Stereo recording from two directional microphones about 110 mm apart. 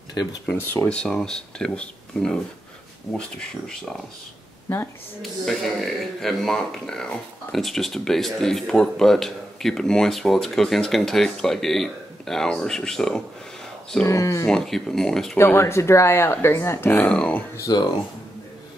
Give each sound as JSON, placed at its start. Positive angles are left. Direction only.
{"t": 0.1, "sound": "speech", "side_deg": 40}
{"t": 0.6, "sound": "speech", "side_deg": 15}
{"t": 5.2, "sound": "speech", "side_deg": 5}
{"t": 14.0, "sound": "speech", "side_deg": 30}
{"t": 14.4, "sound": "speech", "side_deg": 5}
{"t": 15.3, "sound": "speech", "side_deg": 25}
{"t": 17.6, "sound": "speech", "side_deg": 35}